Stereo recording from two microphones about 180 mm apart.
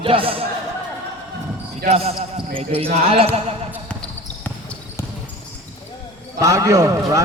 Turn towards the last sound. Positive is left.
turn(degrees=-20)  # may be behind; listen again after turning